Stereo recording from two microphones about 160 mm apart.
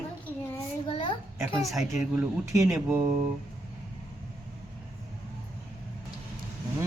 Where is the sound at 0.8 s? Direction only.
30° left (ahead or behind).